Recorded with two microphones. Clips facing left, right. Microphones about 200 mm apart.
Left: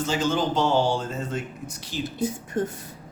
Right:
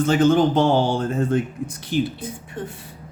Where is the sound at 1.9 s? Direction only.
15° right (ahead or behind).